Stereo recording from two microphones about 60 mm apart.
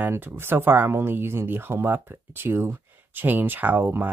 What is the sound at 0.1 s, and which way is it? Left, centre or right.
Speech, right.